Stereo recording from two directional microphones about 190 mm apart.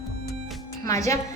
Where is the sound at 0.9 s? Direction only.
15° left (ahead or behind).